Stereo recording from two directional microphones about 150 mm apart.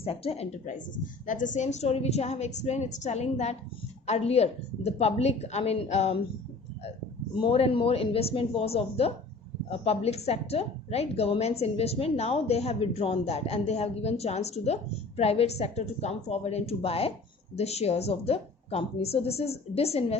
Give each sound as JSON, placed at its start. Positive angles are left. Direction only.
{"t": 0.0, "sound": "a woman's voice", "side_deg": 40}
{"t": 7.3, "sound": "a woman's voice", "side_deg": 35}